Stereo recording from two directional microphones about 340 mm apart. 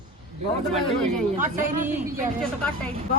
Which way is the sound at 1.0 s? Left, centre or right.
Centre.